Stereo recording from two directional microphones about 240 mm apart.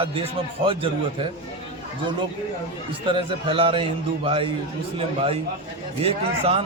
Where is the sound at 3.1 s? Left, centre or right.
Right.